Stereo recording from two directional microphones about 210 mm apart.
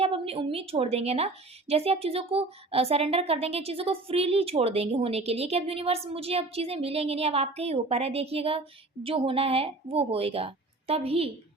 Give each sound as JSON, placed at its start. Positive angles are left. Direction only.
{"t": 0.0, "sound": "a woman's voice", "side_deg": -25}